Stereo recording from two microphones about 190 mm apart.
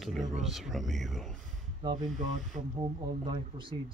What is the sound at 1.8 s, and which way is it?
Speech, 20° right (ahead or behind).